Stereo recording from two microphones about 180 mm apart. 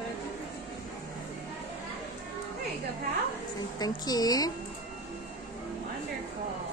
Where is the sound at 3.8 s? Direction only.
20° left (ahead or behind).